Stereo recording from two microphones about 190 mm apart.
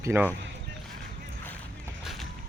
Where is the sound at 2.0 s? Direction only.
Centre (ahead or behind).